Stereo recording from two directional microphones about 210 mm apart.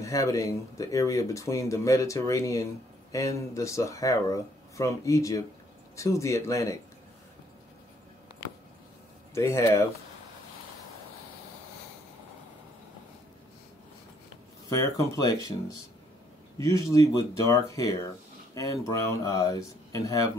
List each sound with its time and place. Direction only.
0.0 s speech: 15° left (ahead or behind)
9.3 s speech: 15° left (ahead or behind)
14.7 s speech: 15° left (ahead or behind)
16.5 s speech: 15° left (ahead or behind)